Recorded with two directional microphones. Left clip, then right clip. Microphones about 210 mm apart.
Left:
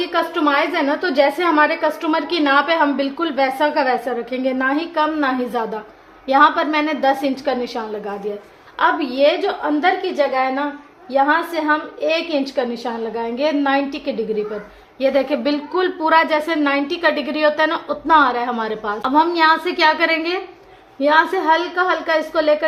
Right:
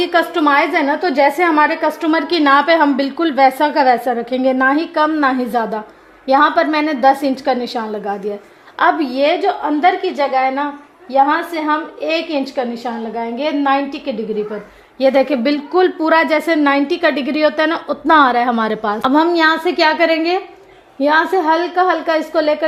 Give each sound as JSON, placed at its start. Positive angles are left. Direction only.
{"t": 0.0, "sound": "a woman's voice", "side_deg": -45}
{"t": 14.9, "sound": "a woman's voice", "side_deg": -40}